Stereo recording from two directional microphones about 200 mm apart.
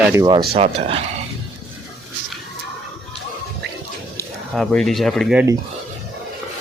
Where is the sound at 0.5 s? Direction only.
30° right (ahead or behind).